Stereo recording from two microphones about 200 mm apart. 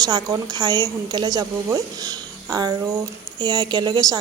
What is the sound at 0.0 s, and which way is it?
A woman's voice, 20° right (ahead or behind).